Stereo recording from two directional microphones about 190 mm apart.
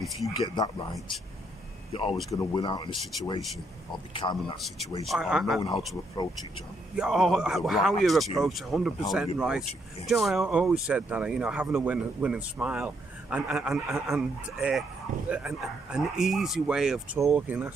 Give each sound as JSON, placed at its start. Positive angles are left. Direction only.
{"t": 0.4, "sound": "speech", "side_deg": 25}
{"t": 4.1, "sound": "speech", "side_deg": 25}
{"t": 4.6, "sound": "speech", "side_deg": 0}
{"t": 5.6, "sound": "speech", "side_deg": 25}
{"t": 7.0, "sound": "speech", "side_deg": 0}